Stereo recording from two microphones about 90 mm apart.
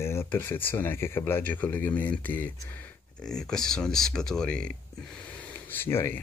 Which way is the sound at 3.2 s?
5° left (ahead or behind).